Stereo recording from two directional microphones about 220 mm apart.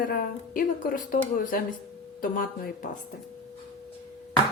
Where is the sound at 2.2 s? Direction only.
40° left (ahead or behind).